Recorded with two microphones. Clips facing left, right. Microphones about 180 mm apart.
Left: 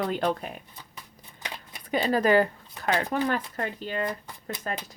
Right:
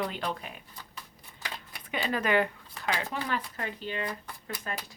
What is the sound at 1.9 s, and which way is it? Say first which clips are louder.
Speech: left 6 dB; 40° left (ahead or behind).